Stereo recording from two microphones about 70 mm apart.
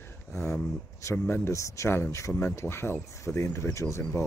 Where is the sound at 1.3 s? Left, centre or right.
Left.